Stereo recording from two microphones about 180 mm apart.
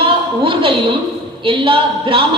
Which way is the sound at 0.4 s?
30° right (ahead or behind).